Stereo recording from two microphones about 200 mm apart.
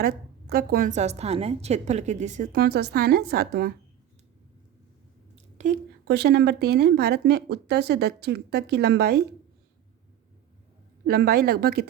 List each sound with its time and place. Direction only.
0.0 s speech: 50° right (ahead or behind)
5.5 s a woman's voice: 40° right (ahead or behind)
6.1 s speech: 55° right (ahead or behind)
11.0 s speech: 50° right (ahead or behind)